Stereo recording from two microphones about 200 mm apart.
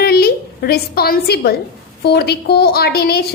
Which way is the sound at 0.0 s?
50° left (ahead or behind).